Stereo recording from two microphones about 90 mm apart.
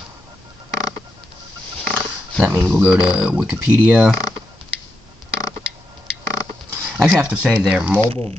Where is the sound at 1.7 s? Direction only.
10° left (ahead or behind).